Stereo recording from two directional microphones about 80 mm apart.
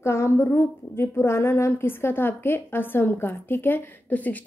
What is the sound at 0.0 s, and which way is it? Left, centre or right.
A woman's voice, left.